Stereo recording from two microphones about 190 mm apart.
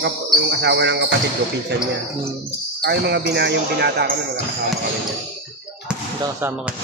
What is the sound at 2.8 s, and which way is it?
Speech, 60° right (ahead or behind).